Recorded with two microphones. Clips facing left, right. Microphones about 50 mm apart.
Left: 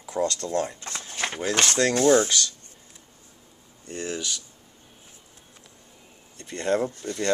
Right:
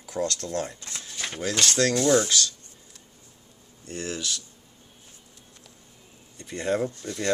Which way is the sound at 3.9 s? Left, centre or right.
Centre.